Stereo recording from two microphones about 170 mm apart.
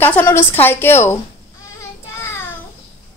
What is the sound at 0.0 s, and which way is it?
A woman's voice, 10° left (ahead or behind).